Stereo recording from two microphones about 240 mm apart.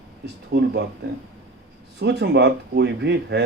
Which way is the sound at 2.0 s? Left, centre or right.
Right.